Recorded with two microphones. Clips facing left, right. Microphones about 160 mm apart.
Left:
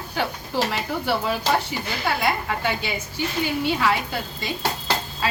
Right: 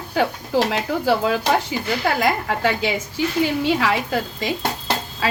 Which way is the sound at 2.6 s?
90° right.